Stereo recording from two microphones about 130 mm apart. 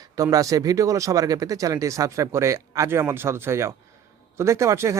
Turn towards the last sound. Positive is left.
turn(degrees=-20)  # may be behind; listen again after turning